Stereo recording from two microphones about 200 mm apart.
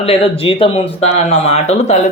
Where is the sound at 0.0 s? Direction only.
30° left (ahead or behind).